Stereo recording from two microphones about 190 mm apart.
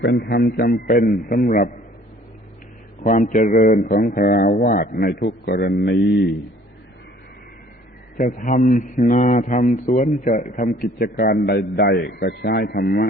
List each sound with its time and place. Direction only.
0.0 s a man's voice: 60° left (ahead or behind)
3.0 s a man's voice: 40° left (ahead or behind); by 6.3 s 65° left (ahead or behind)
8.2 s a man's voice: 45° left (ahead or behind)